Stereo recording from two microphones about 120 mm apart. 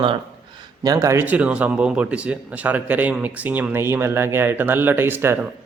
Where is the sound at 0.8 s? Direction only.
30° right (ahead or behind).